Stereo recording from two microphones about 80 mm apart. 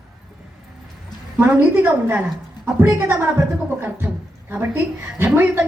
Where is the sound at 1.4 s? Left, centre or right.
Right.